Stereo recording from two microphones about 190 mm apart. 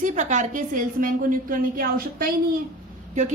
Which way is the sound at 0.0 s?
40° right (ahead or behind).